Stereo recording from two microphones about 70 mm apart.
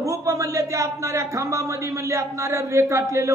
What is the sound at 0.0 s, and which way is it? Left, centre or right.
A man's voice, right.